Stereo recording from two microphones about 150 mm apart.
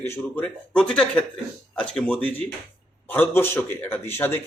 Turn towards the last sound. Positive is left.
turn(degrees=15)  # may be behind; listen again after turning